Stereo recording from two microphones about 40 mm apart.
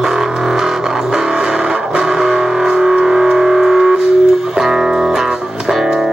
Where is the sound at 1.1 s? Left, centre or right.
Centre.